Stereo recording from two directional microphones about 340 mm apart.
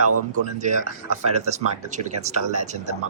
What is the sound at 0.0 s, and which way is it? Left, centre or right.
Speech, right.